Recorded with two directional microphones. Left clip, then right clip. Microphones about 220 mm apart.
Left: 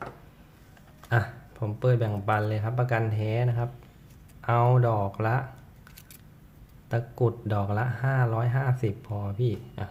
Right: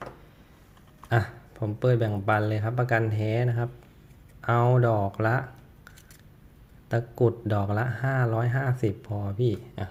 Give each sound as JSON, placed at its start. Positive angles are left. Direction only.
{"t": 1.1, "sound": "speech", "side_deg": -15}
{"t": 6.8, "sound": "speech", "side_deg": -15}